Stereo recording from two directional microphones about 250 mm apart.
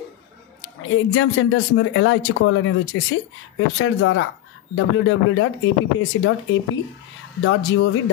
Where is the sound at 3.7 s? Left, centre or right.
Left.